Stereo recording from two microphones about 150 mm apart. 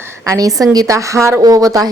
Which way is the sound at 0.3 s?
25° right (ahead or behind).